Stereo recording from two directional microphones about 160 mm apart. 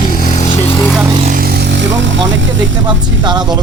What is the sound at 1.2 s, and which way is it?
Vehicle, 60° right (ahead or behind).